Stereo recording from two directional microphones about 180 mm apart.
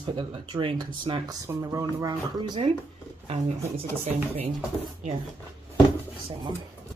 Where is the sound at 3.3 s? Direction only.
35° right (ahead or behind).